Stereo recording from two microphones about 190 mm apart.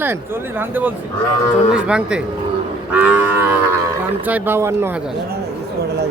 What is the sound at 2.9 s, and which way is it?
Livestock, 10° right (ahead or behind).